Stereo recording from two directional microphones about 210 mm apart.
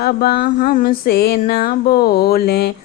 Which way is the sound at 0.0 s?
45° left (ahead or behind).